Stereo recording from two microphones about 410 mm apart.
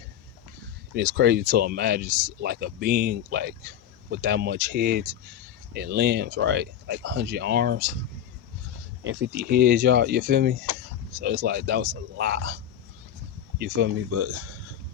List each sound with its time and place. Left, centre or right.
0.9 s speech: right
9.0 s speech: right
13.6 s speech: right